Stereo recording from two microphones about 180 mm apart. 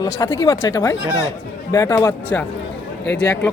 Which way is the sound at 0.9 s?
90° left.